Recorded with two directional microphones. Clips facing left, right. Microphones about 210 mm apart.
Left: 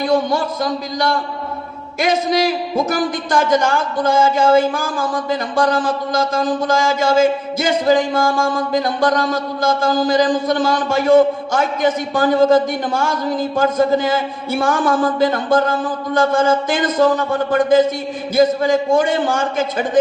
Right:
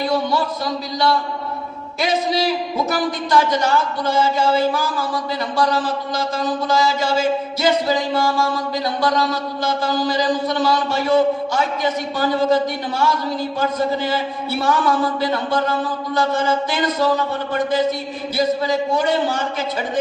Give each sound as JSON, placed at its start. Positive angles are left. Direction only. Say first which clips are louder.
{"t": 0.1, "sound": "a man's voice", "louder": "left 6 dB", "side_deg": 50}
{"t": 2.0, "sound": "a man's voice", "louder": "left 3 dB", "side_deg": 50}